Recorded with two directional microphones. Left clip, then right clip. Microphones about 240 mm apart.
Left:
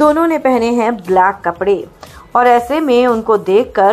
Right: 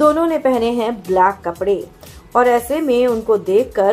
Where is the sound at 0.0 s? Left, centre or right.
Centre.